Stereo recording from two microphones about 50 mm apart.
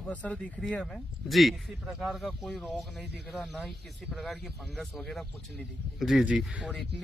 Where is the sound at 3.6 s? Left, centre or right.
Centre.